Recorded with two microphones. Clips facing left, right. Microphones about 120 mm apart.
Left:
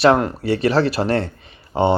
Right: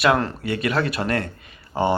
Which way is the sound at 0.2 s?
25° left (ahead or behind).